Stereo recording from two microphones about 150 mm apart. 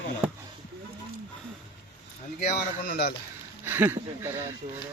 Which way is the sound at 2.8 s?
75° left (ahead or behind).